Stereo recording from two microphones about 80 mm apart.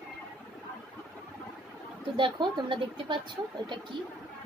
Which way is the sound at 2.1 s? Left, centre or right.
Right.